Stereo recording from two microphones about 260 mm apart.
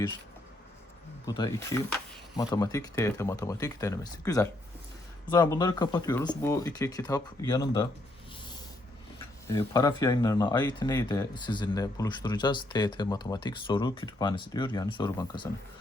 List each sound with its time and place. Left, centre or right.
1.3 s speech: centre
9.5 s speech: centre